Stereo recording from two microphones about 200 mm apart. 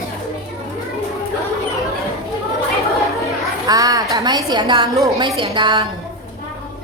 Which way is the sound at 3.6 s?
20° right (ahead or behind).